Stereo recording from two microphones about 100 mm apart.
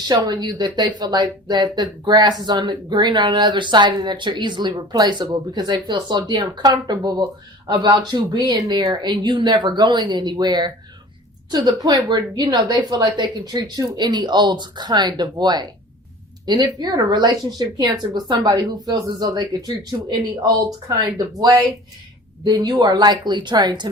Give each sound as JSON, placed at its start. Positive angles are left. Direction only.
{"t": 0.0, "sound": "speech", "side_deg": -45}